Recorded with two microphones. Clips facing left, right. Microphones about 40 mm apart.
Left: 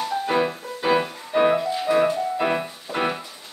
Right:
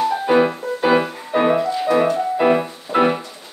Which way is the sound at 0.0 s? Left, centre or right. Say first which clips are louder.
Right 6 dB; centre.